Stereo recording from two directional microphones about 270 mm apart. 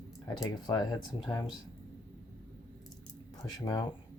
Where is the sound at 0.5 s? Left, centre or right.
Centre.